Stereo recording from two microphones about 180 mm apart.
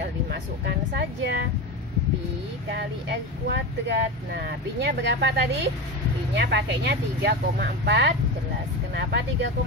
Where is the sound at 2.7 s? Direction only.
65° right (ahead or behind).